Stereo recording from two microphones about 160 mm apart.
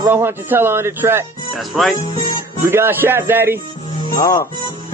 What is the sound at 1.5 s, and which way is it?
Speech, centre (ahead or behind).